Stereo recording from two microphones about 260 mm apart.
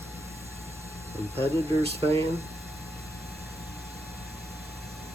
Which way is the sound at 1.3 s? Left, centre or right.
Right.